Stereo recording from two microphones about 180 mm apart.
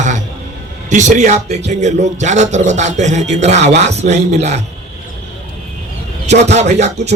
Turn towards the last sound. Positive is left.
turn(degrees=-40)  # may be behind; listen again after turning